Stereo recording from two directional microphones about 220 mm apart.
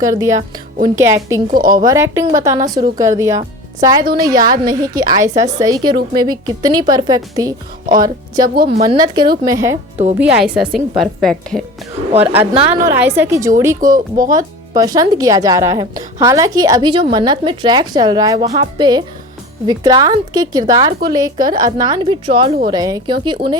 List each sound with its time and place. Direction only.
0.0 s speech: 15° right (ahead or behind)
1.5 s speech: 40° right (ahead or behind)
1.7 s speech: 15° right (ahead or behind)
4.0 s a woman's voice: 45° right (ahead or behind)
4.3 s speech: 15° right (ahead or behind)
8.5 s a woman's voice: 45° right (ahead or behind)
8.8 s a woman's voice: 20° right (ahead or behind)
10.2 s a woman's voice: 5° right (ahead or behind)
13.8 s speech: 40° right (ahead or behind)
14.3 s a woman's voice: 15° right (ahead or behind)